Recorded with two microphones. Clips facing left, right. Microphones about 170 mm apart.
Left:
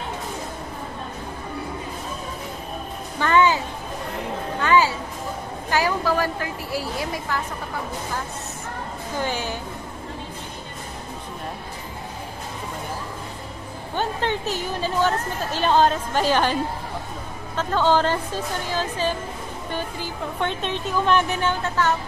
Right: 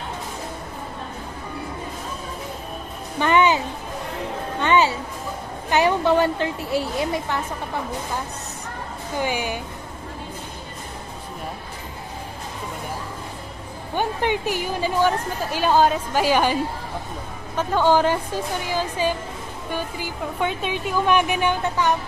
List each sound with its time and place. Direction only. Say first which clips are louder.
3.2 s music: right 1 dB; 20° right (ahead or behind)
5.7 s a woman's voice: right 4 dB; 25° right (ahead or behind)
9.2 s a woman's voice: right 2 dB; 15° right (ahead or behind)
13.9 s a woman's voice: right 2 dB; 15° right (ahead or behind)
17.6 s a woman's voice: right 2 dB; 10° right (ahead or behind)